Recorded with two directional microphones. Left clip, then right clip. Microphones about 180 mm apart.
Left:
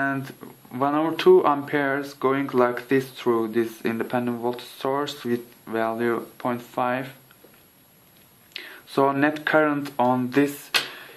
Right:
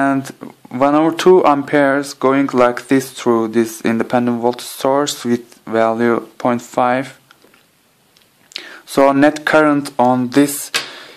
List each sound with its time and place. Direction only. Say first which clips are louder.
0.0 s speech: right 9 dB; 50° right (ahead or behind)
8.5 s speech: right 9 dB; 50° right (ahead or behind)